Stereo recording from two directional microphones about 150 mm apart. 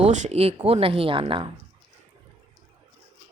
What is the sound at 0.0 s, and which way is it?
A woman's voice, 50° right (ahead or behind).